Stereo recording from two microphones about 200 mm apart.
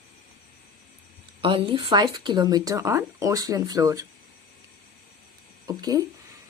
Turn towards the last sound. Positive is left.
turn(degrees=-20)  # may be behind; listen again after turning